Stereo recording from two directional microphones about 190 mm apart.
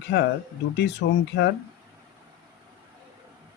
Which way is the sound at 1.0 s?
65° left (ahead or behind).